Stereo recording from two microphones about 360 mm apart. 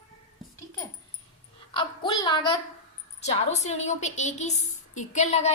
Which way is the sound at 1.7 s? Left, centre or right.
Centre.